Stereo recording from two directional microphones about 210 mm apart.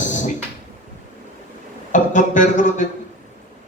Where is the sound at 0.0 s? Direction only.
35° left (ahead or behind).